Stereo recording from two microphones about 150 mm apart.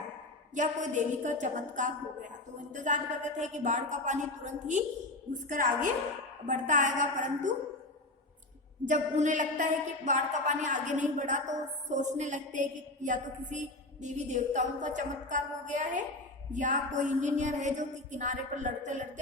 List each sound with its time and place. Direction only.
0.5 s a woman's voice: 55° right (ahead or behind)
8.8 s a woman's voice: 55° right (ahead or behind)